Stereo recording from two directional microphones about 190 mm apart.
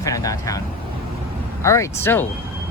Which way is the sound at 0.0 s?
20° left (ahead or behind).